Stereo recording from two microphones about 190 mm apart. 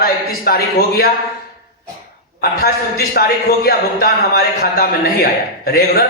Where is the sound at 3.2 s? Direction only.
50° left (ahead or behind).